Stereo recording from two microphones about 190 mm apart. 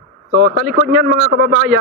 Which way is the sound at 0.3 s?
50° right (ahead or behind).